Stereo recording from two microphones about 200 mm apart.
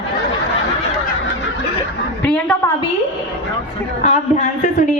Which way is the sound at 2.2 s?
5° left (ahead or behind).